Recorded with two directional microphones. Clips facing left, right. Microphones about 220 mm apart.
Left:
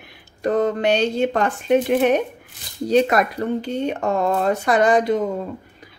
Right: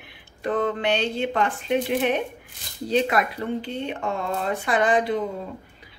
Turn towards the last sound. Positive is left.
turn(degrees=45)  # may be behind; listen again after turning